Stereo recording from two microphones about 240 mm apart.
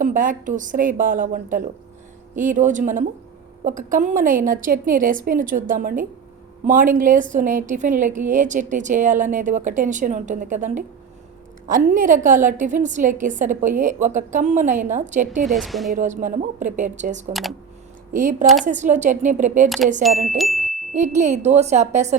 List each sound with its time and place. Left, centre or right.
0.0 s a woman's voice: right
15.4 s speech: centre
15.9 s a woman's voice: right
19.6 s speech: centre
20.9 s speech: right